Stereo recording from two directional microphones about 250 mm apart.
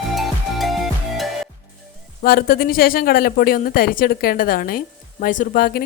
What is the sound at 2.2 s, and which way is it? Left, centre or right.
Speech, left.